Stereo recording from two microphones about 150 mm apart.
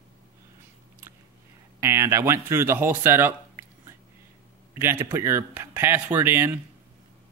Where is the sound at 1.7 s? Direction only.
20° right (ahead or behind).